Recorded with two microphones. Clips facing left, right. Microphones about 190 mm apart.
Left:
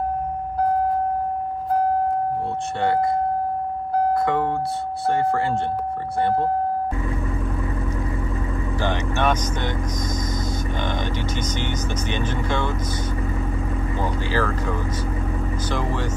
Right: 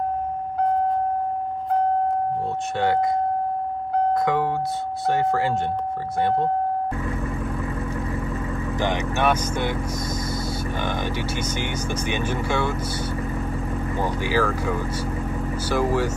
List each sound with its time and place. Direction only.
8.7 s speech: 15° right (ahead or behind)
10.8 s speech: 10° right (ahead or behind)
13.9 s speech: 10° right (ahead or behind)